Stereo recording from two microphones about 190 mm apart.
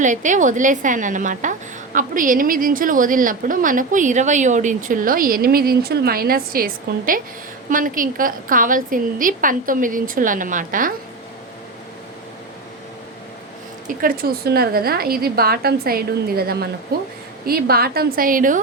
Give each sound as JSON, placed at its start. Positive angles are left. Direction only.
{"t": 0.0, "sound": "a woman's voice", "side_deg": -40}
{"t": 13.8, "sound": "a woman's voice", "side_deg": -50}